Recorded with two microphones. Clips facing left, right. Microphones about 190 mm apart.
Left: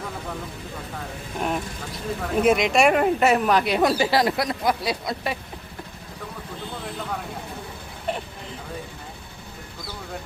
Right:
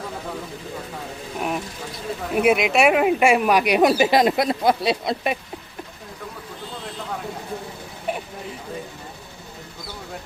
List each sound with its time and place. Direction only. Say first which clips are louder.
1.4 s speech: even; 5° right (ahead or behind); by 5.4 s 20° right (ahead or behind)